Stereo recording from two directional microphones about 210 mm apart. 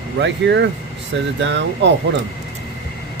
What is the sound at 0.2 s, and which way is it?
Speech, 55° right (ahead or behind).